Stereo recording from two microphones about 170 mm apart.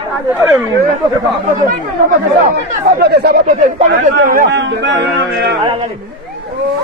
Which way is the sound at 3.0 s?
70° right (ahead or behind).